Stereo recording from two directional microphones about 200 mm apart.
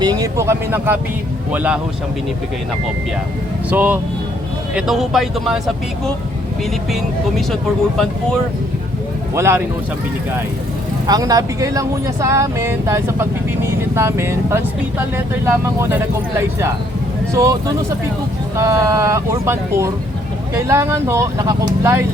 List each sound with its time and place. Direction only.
0.0 s speech: 20° right (ahead or behind)
3.7 s speech: 10° right (ahead or behind)
6.9 s speech: centre (ahead or behind)
9.3 s speech: 15° right (ahead or behind)
11.0 s speech: 20° right (ahead or behind)
17.3 s speech: 15° right (ahead or behind)